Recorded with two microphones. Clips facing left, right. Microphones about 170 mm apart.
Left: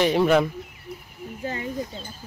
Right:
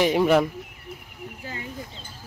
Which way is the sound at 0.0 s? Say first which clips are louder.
Even; 10° right (ahead or behind).